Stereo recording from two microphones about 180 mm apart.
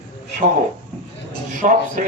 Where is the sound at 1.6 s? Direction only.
45° right (ahead or behind).